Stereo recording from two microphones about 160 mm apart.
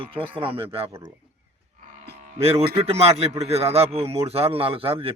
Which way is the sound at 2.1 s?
40° right (ahead or behind).